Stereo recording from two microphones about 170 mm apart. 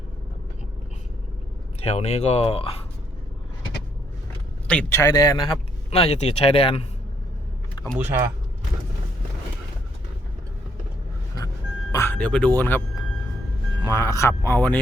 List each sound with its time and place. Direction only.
1.8 s speech: 40° left (ahead or behind)
4.7 s speech: 10° left (ahead or behind)
5.9 s speech: 40° left (ahead or behind)
7.8 s vehicle: 25° left (ahead or behind)
11.9 s speech: 15° left (ahead or behind)
13.8 s speech: 15° left (ahead or behind)